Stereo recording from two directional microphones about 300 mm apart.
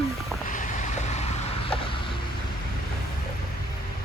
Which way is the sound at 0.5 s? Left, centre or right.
Left.